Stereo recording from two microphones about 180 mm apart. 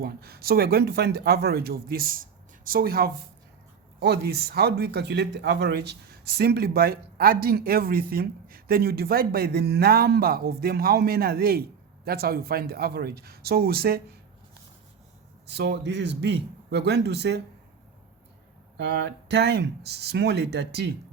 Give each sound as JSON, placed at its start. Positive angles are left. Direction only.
{"t": 0.0, "sound": "speech", "side_deg": -60}
{"t": 15.4, "sound": "speech", "side_deg": -70}
{"t": 18.8, "sound": "speech", "side_deg": -70}